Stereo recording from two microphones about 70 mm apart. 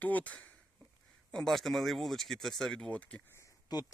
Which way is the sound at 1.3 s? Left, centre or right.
Centre.